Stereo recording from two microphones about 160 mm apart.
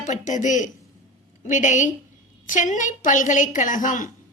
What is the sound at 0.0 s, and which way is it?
A woman's voice, 50° left (ahead or behind).